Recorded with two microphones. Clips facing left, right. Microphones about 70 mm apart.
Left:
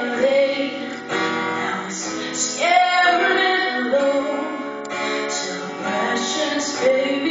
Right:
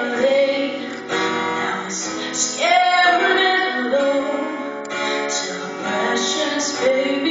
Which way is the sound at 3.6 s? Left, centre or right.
Right.